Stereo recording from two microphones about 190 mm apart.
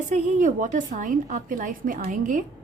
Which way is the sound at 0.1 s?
40° right (ahead or behind).